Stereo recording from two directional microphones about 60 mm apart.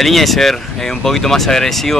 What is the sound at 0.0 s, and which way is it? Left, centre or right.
Speech, centre.